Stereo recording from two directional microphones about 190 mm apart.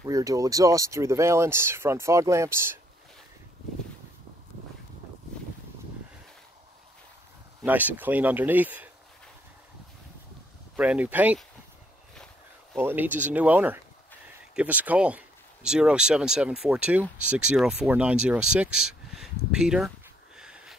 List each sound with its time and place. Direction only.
0.0 s speech: 15° right (ahead or behind)
7.6 s speech: 10° right (ahead or behind)
10.8 s speech: 5° right (ahead or behind)
12.7 s speech: 10° right (ahead or behind)
20.3 s sniff: 5° right (ahead or behind)